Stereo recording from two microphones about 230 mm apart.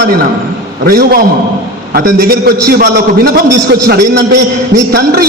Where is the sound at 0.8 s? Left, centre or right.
Right.